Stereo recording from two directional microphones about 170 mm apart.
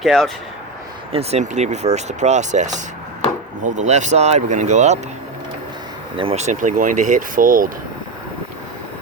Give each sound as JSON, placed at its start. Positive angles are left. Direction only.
{"t": 0.0, "sound": "speech", "side_deg": 0}
{"t": 1.1, "sound": "speech", "side_deg": -40}
{"t": 6.1, "sound": "speech", "side_deg": -35}